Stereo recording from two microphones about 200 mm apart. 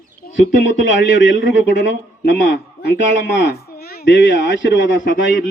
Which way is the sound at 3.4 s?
50° left (ahead or behind).